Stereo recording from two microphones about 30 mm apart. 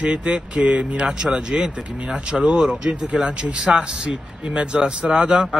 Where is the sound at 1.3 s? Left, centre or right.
Right.